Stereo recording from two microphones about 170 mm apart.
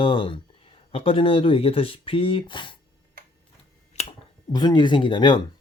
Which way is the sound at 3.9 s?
40° left (ahead or behind).